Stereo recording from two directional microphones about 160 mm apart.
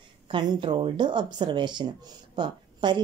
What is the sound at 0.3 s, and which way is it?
A woman's voice, 30° right (ahead or behind).